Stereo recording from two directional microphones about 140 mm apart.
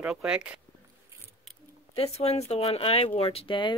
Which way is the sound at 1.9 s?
45° left (ahead or behind).